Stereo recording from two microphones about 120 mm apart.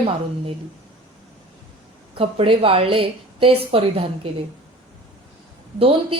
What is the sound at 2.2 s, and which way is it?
A woman's voice, 50° right (ahead or behind).